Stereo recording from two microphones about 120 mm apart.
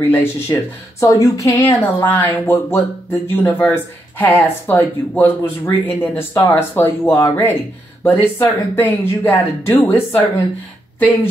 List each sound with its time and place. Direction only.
0.0 s speech: 20° left (ahead or behind)
2.0 s speech: 15° left (ahead or behind)